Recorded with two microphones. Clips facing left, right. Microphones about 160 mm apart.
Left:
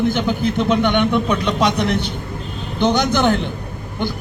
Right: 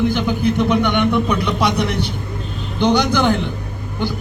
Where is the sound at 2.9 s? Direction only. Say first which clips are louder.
Even; 20° left (ahead or behind).